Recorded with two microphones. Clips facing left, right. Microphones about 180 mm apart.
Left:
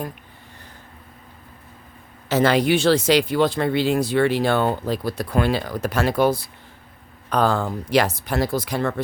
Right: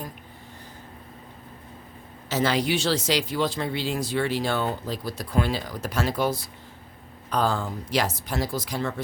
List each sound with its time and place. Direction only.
2.3 s speech: 60° left (ahead or behind)